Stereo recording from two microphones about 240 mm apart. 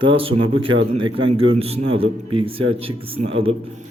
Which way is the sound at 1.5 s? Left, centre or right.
Right.